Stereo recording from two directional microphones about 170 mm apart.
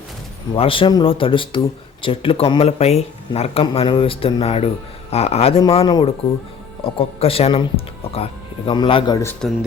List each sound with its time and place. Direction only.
0.5 s speech: 30° left (ahead or behind)
9.4 s speech: 5° left (ahead or behind)